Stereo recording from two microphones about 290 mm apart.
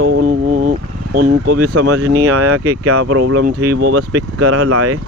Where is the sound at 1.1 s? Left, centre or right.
Right.